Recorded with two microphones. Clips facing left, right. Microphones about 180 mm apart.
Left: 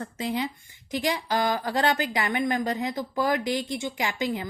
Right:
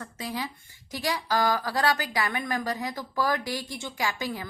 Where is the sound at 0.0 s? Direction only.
25° left (ahead or behind).